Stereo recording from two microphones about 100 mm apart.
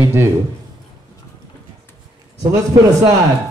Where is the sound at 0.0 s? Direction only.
25° right (ahead or behind).